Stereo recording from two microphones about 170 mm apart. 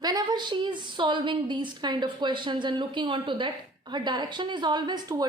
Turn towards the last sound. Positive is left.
turn(degrees=-25)  # may be behind; listen again after turning